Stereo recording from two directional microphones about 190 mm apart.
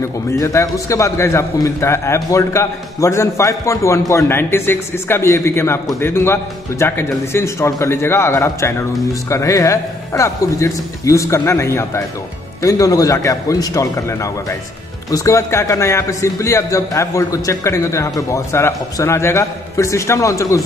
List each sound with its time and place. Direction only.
0.4 s a man's voice: 15° left (ahead or behind)